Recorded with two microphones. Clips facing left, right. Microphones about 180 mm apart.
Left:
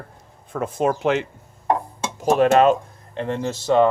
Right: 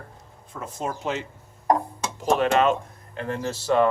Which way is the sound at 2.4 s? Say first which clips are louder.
Left 7 dB; 40° left (ahead or behind).